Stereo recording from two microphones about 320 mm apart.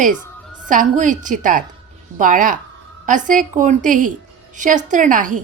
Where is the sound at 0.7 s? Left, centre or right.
Right.